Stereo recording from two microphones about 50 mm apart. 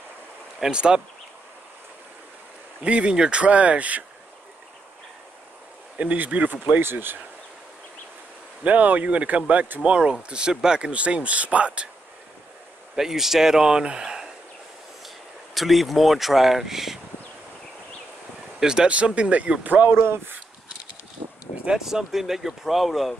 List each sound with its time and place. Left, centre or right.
0.6 s speech: centre
2.8 s speech: right
5.9 s speech: right
6.8 s speech: right
8.6 s speech: right
9.8 s speech: centre
12.9 s speech: centre
15.5 s speech: centre
18.6 s speech: centre
19.6 s speech: right
19.9 s speech: right
21.6 s speech: centre